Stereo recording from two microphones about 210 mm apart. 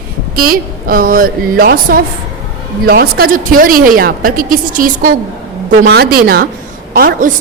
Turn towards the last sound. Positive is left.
turn(degrees=-45)  # may be behind; listen again after turning